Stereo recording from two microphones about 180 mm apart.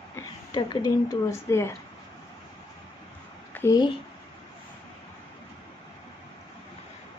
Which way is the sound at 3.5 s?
20° left (ahead or behind).